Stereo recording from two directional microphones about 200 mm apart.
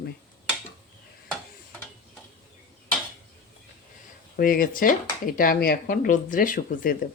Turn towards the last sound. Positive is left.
turn(degrees=45)  # may be behind; listen again after turning